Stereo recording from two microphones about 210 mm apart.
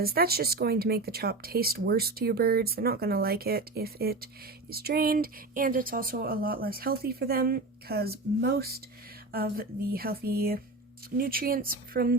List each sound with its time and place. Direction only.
0.0 s speech: 45° right (ahead or behind)